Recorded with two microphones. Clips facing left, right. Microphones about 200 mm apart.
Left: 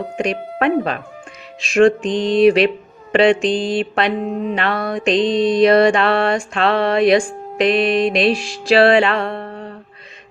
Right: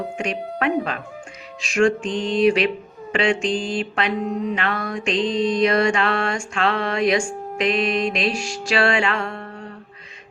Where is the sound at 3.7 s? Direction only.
35° left (ahead or behind).